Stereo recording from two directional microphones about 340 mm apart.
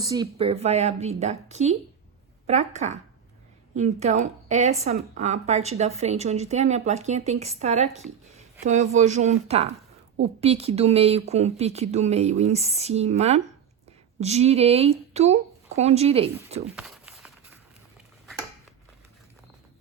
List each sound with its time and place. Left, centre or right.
0.0 s speech: centre
16.7 s walk: centre